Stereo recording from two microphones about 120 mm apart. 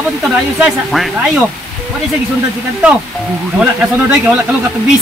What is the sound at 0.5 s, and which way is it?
Speech, 5° right (ahead or behind).